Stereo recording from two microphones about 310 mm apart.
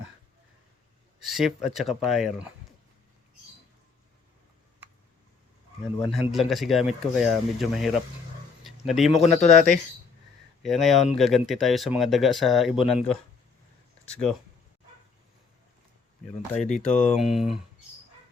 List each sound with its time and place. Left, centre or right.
1.2 s speech: centre
6.2 s speech: centre
8.6 s a sound: centre
9.1 s speech: left
10.6 s speech: centre
16.7 s speech: centre